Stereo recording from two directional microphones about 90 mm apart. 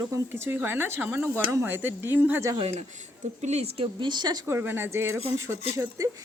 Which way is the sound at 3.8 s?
55° right (ahead or behind).